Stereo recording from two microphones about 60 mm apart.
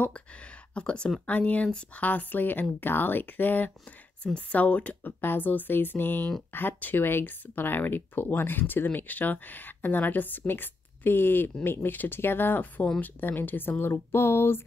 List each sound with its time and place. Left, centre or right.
0.0 s a sound: centre
1.2 s speech: left
5.2 s speech: left